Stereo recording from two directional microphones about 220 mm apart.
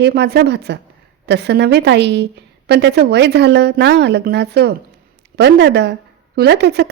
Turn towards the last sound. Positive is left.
turn(degrees=-50)  # may be behind; listen again after turning